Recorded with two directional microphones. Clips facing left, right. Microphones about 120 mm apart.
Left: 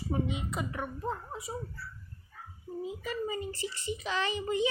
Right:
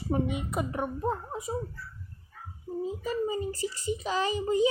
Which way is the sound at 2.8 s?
40° right (ahead or behind).